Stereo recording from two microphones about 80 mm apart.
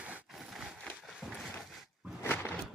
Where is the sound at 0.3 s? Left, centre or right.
Centre.